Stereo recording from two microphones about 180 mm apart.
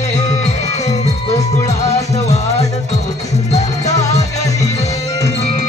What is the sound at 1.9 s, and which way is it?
Music, 40° left (ahead or behind).